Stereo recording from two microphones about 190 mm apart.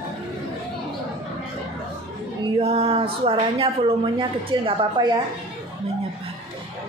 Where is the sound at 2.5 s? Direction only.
30° right (ahead or behind).